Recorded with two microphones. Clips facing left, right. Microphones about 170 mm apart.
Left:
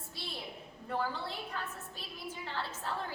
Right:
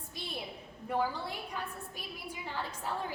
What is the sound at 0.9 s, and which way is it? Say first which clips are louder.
A woman's voice: right 3 dB; 15° right (ahead or behind).